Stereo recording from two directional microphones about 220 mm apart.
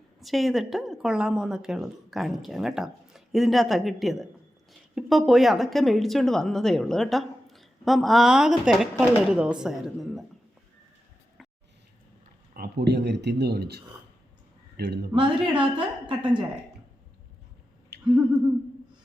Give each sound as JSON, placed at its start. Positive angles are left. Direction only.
{"t": 0.2, "sound": "a woman's voice", "side_deg": 0}
{"t": 12.5, "sound": "speech", "side_deg": -50}
{"t": 15.1, "sound": "a woman's voice", "side_deg": -20}
{"t": 17.9, "sound": "a sound", "side_deg": -50}